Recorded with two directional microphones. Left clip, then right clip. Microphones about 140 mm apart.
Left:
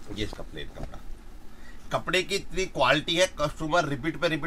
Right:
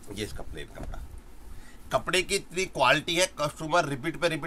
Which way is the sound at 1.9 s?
15° right (ahead or behind).